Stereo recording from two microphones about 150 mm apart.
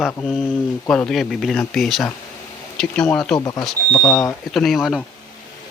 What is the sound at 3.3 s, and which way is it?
Speech, 25° left (ahead or behind).